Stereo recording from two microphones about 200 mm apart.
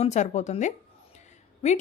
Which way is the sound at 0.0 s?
35° left (ahead or behind).